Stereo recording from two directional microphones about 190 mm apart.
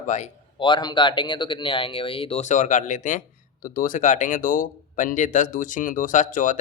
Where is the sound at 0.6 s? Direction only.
25° left (ahead or behind).